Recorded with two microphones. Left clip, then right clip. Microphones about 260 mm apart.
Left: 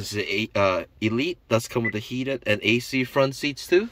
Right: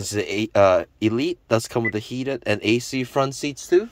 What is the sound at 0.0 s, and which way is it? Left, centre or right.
A man's voice, centre.